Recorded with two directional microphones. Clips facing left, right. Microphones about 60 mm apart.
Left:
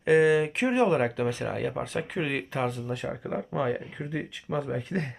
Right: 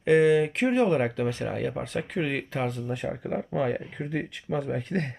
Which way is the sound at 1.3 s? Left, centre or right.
Centre.